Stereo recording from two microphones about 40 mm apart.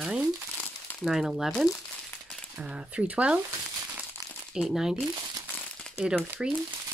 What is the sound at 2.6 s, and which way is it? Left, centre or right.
Speech, right.